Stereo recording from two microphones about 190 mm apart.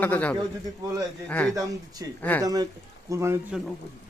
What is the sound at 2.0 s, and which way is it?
A man's voice, 20° right (ahead or behind).